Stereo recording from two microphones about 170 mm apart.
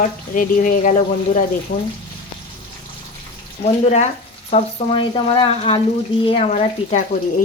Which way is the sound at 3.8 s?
40° left (ahead or behind).